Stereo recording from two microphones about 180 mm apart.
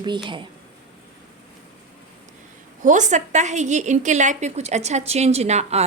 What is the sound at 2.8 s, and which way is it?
A woman's voice, 45° right (ahead or behind).